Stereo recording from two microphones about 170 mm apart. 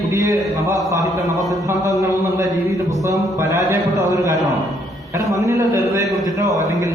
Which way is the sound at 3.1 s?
15° right (ahead or behind).